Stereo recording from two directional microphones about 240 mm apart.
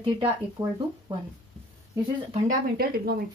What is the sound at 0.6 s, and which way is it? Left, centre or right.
Speech, centre.